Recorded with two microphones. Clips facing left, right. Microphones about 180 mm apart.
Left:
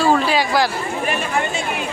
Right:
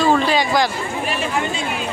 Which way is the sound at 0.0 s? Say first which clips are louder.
Even; 5° left (ahead or behind).